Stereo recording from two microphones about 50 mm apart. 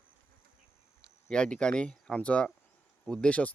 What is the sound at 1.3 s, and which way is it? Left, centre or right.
Speech, centre.